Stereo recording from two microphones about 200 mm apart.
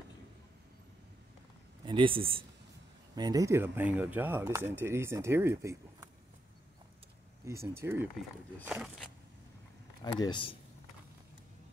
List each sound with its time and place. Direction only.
1.9 s speech: 25° right (ahead or behind)
7.6 s speech: 10° right (ahead or behind)
10.1 s speech: 25° left (ahead or behind)